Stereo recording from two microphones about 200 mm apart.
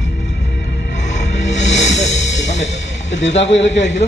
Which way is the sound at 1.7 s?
35° left (ahead or behind).